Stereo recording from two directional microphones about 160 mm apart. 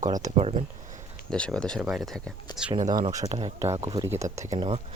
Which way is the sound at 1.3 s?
5° left (ahead or behind).